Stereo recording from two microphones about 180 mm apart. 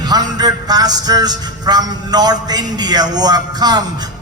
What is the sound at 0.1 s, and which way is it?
A man's voice, 20° right (ahead or behind).